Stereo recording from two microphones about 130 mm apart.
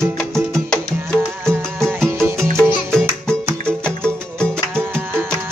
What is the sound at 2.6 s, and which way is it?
Music, 5° left (ahead or behind).